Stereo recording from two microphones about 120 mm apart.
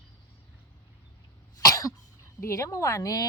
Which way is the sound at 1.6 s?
25° left (ahead or behind).